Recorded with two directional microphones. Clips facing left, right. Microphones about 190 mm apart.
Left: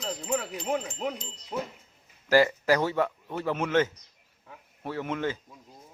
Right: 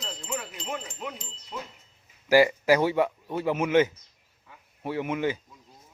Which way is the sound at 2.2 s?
10° right (ahead or behind).